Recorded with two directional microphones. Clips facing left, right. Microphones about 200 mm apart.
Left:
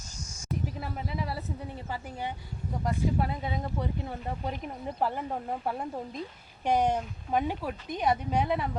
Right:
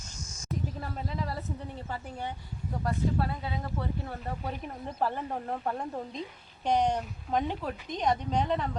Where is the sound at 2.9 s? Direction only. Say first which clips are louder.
Left 1 dB; 15° left (ahead or behind).